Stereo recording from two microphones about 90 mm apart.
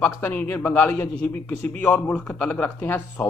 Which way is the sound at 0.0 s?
20° left (ahead or behind).